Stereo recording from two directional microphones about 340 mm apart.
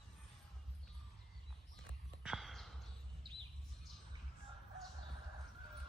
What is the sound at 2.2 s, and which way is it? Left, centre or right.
Clip-clop, centre.